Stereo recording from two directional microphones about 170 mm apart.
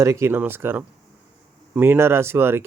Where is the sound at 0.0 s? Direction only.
15° right (ahead or behind).